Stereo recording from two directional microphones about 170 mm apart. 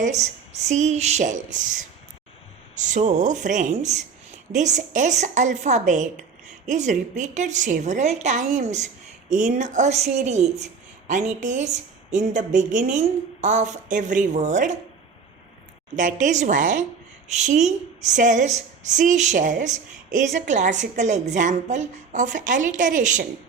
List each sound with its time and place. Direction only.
0.0 s a woman's voice: 45° right (ahead or behind)
16.0 s a woman's voice: 50° right (ahead or behind)